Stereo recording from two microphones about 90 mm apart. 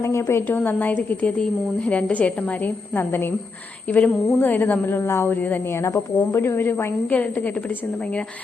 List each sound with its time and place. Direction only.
0.0 s a woman's voice: 30° left (ahead or behind)
0.4 s a woman's voice: 20° left (ahead or behind)